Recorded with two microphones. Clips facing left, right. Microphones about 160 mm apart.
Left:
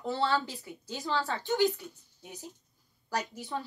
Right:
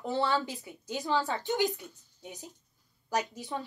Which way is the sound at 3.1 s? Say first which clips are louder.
Right 2 dB; 20° right (ahead or behind).